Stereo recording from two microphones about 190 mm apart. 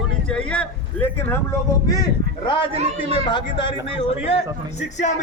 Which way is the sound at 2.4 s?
25° left (ahead or behind).